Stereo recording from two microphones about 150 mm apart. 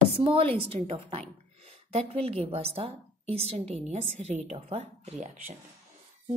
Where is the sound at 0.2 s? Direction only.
40° right (ahead or behind).